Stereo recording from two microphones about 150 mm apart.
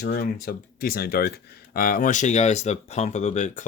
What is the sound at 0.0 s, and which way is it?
Speech, 85° left.